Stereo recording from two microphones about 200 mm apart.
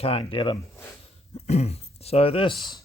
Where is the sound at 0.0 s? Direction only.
30° left (ahead or behind).